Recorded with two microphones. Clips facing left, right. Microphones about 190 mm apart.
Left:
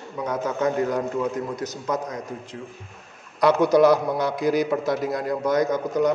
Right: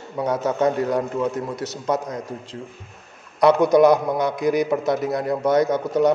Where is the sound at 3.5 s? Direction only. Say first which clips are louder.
Even; 20° right (ahead or behind).